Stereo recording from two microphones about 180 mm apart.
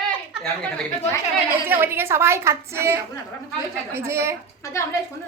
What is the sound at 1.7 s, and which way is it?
A woman's voice, 10° right (ahead or behind).